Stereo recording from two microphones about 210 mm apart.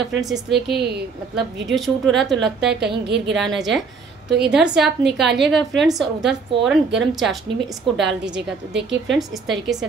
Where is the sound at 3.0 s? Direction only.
55° right (ahead or behind).